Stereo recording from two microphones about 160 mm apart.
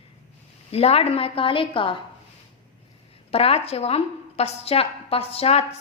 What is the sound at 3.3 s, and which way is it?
A woman's voice, 40° left (ahead or behind).